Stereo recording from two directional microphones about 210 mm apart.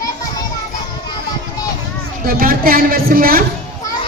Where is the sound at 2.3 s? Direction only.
45° right (ahead or behind).